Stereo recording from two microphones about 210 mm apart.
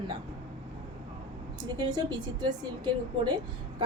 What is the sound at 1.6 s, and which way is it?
Speech, 20° right (ahead or behind).